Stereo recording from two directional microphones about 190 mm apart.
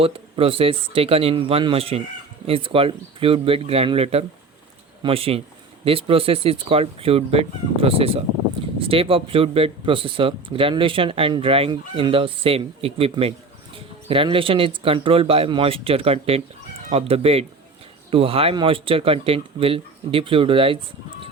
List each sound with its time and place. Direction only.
0.0 s speech: 30° right (ahead or behind)